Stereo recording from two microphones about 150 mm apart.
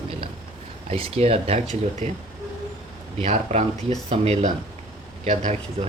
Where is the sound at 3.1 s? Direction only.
50° right (ahead or behind).